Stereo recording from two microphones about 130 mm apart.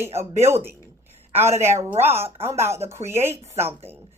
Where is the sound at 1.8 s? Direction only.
20° right (ahead or behind).